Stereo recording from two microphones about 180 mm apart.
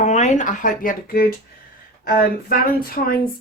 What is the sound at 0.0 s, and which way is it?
A woman's voice, 40° left (ahead or behind).